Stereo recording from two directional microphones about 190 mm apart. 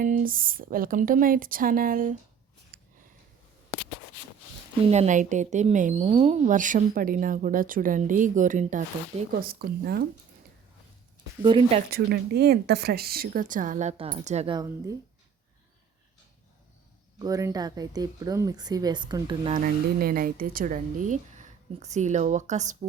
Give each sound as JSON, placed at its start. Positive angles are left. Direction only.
{"t": 0.0, "sound": "a woman's voice", "side_deg": -45}
{"t": 2.7, "sound": "a sound", "side_deg": -55}
{"t": 4.9, "sound": "a woman's voice", "side_deg": -40}
{"t": 11.4, "sound": "speech", "side_deg": -25}
{"t": 11.9, "sound": "a woman's voice", "side_deg": -55}
{"t": 14.5, "sound": "speech", "side_deg": -20}
{"t": 17.2, "sound": "speech", "side_deg": -20}
{"t": 19.5, "sound": "speech", "side_deg": -50}